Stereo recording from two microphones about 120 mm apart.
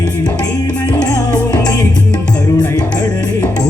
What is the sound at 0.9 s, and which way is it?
Music, 30° left (ahead or behind).